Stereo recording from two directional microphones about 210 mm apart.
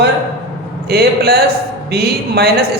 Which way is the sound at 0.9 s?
50° right (ahead or behind).